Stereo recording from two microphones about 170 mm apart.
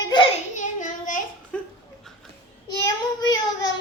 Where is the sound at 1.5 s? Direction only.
5° left (ahead or behind).